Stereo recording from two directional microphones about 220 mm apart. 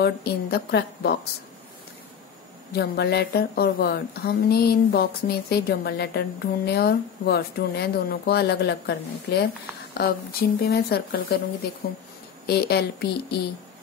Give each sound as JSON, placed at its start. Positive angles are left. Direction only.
{"t": 0.0, "sound": "a woman's voice", "side_deg": 45}
{"t": 2.7, "sound": "a woman's voice", "side_deg": 45}